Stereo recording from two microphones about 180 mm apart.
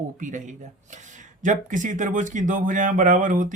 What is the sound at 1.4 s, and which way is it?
Speech, 45° right (ahead or behind).